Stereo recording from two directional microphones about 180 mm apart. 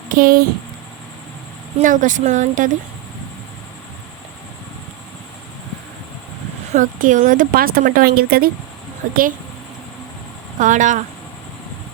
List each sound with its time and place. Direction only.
0.1 s speech: 50° right (ahead or behind)
1.8 s speech: 45° right (ahead or behind)
6.7 s speech: 45° right (ahead or behind)
10.6 s speech: 45° right (ahead or behind)